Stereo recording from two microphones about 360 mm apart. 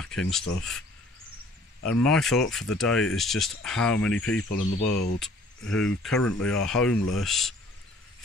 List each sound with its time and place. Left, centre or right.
0.0 s speech: centre
1.9 s speech: centre
4.4 s speech: left
5.2 s speech: centre